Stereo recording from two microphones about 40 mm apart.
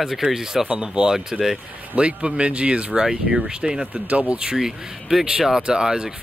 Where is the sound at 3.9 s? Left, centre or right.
Right.